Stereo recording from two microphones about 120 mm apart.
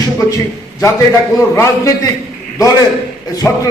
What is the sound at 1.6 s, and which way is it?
Speech, 25° left (ahead or behind).